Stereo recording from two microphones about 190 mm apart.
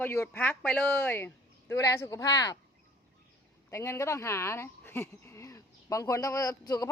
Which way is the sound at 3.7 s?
15° left (ahead or behind).